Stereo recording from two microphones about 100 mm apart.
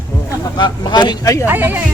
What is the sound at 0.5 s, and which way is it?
Speech, 45° left (ahead or behind).